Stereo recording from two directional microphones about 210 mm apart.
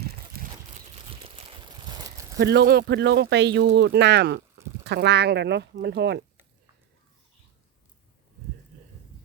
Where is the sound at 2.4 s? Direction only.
55° right (ahead or behind).